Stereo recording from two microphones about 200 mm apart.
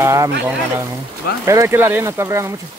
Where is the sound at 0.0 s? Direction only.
15° right (ahead or behind).